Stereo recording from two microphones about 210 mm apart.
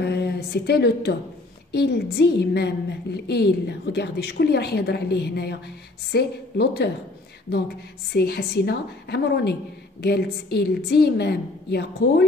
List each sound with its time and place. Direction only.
0.0 s a woman's voice: 50° left (ahead or behind)
8.1 s a woman's voice: 50° left (ahead or behind)